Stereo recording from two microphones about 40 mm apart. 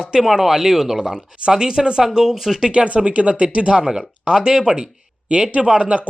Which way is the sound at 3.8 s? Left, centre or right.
Centre.